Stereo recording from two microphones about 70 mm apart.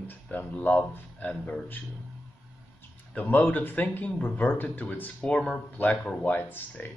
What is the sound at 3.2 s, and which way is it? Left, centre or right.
Speech, left.